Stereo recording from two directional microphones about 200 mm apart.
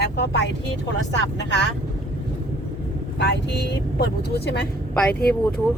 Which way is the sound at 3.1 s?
60° left (ahead or behind).